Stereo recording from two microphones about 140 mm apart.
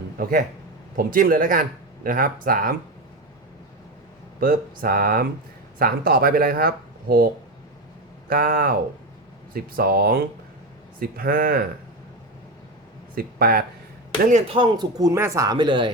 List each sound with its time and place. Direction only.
0.2 s a man's voice: 90° right
4.4 s speech: 90° right
8.3 s speech: 90° right
13.1 s speech: 90° right
14.4 s speech: 35° right (ahead or behind)